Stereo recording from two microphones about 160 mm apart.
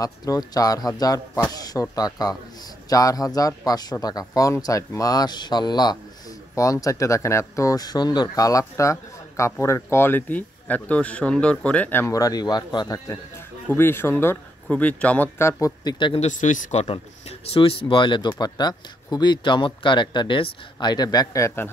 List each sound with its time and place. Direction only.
0.0 s speech: 20° left (ahead or behind)
16.2 s speech: 50° left (ahead or behind); by 21.6 s 20° left (ahead or behind)